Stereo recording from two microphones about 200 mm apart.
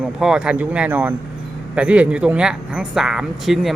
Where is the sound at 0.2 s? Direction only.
5° right (ahead or behind).